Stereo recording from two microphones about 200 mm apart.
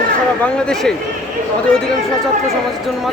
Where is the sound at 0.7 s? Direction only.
5° left (ahead or behind).